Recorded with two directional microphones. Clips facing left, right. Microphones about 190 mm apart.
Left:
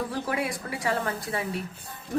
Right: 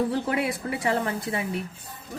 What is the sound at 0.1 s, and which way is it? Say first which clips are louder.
A woman's voice: right 3 dB; 25° right (ahead or behind).